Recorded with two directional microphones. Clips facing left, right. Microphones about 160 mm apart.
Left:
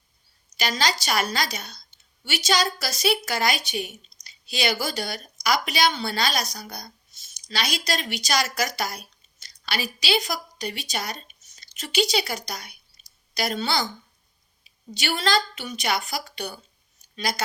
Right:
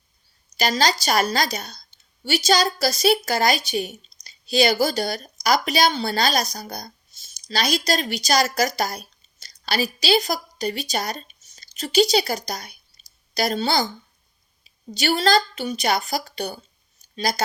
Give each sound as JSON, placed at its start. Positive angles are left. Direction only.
{"t": 0.5, "sound": "a woman's voice", "side_deg": -40}
{"t": 13.0, "sound": "a sound", "side_deg": -30}
{"t": 13.3, "sound": "a woman's voice", "side_deg": -35}